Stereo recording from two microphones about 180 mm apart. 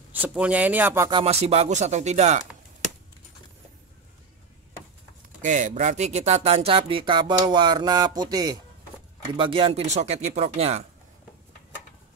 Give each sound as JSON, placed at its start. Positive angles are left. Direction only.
{"t": 0.1, "sound": "speech", "side_deg": -10}
{"t": 1.1, "sound": "speech", "side_deg": -35}
{"t": 5.4, "sound": "speech", "side_deg": -45}